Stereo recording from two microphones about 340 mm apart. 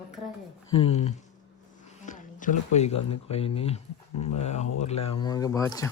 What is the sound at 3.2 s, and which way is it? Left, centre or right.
Speech, centre.